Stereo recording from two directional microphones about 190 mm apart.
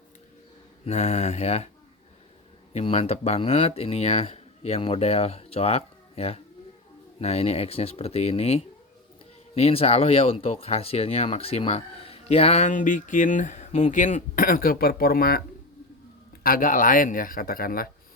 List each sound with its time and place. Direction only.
0.9 s speech: 35° left (ahead or behind)
2.7 s speech: 30° left (ahead or behind); by 15.4 s 50° left (ahead or behind)
16.4 s speech: 45° left (ahead or behind)